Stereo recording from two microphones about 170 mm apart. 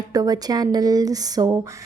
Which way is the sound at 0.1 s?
20° right (ahead or behind).